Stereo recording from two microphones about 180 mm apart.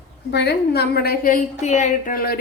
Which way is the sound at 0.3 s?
70° left (ahead or behind).